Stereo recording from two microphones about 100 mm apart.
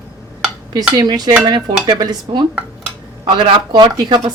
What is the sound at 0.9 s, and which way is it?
Speech, 45° right (ahead or behind).